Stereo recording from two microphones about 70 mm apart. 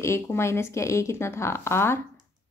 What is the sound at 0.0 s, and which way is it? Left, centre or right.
Speech, left.